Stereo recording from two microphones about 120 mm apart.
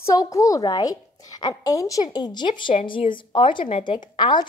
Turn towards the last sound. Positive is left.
turn(degrees=40)  # may be behind; listen again after turning